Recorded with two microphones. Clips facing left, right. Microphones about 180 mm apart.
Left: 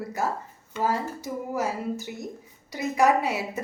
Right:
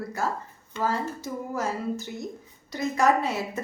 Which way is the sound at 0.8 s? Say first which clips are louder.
Left 1 dB; 15° left (ahead or behind).